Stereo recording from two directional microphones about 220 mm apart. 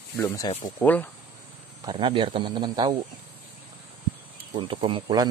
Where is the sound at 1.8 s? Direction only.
20° right (ahead or behind).